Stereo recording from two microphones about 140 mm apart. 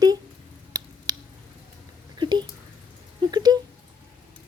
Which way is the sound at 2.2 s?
30° right (ahead or behind).